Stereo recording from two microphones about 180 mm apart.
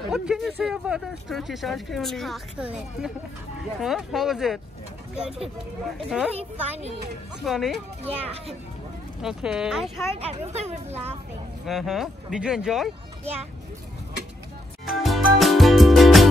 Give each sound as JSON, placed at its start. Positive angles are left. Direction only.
{"t": 0.1, "sound": "speech", "side_deg": -5}
{"t": 5.9, "sound": "speech", "side_deg": -5}
{"t": 6.3, "sound": "speech", "side_deg": -35}
{"t": 7.4, "sound": "speech", "side_deg": 0}
{"t": 9.2, "sound": "speech", "side_deg": -5}
{"t": 10.1, "sound": "speech", "side_deg": -35}
{"t": 11.6, "sound": "speech", "side_deg": 0}
{"t": 14.9, "sound": "music", "side_deg": 0}